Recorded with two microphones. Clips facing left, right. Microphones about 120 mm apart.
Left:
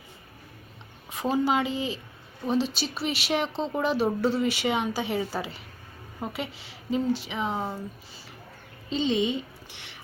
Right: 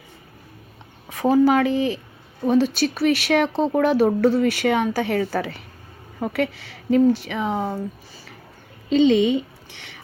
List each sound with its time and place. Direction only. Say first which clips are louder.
1.2 s speech: right 8 dB; 60° right (ahead or behind)
8.9 s speech: right 9 dB; 65° right (ahead or behind)